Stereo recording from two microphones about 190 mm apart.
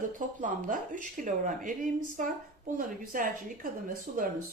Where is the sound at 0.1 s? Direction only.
45° right (ahead or behind).